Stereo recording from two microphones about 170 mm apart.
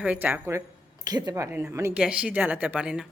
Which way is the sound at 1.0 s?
20° right (ahead or behind).